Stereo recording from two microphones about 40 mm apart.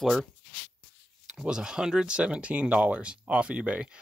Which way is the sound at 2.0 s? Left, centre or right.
Right.